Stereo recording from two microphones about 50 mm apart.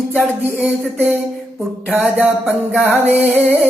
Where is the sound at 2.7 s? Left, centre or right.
Right.